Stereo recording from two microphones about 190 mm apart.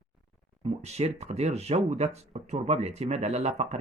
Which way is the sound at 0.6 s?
35° right (ahead or behind).